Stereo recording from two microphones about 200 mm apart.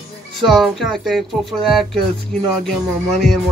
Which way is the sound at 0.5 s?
Centre (ahead or behind).